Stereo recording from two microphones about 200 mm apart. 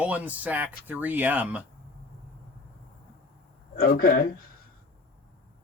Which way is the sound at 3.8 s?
50° left (ahead or behind).